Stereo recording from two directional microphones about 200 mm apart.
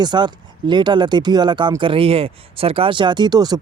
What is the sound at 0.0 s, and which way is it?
Speech, 20° right (ahead or behind).